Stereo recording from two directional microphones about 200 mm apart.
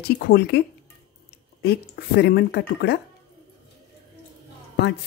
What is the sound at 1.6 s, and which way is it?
Speech, 55° left (ahead or behind).